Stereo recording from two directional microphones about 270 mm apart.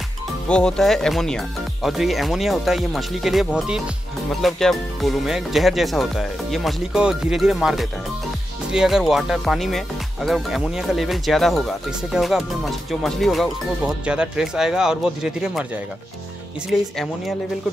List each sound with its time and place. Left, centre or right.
0.5 s speech: centre
16.7 s speech: centre